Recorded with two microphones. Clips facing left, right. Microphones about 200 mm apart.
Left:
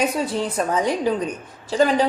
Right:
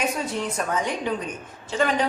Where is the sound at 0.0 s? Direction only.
35° left (ahead or behind).